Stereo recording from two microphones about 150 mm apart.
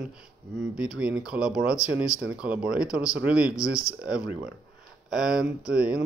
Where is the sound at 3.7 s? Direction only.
20° left (ahead or behind).